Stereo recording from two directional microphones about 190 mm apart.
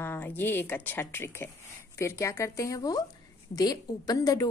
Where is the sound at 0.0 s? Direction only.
10° left (ahead or behind).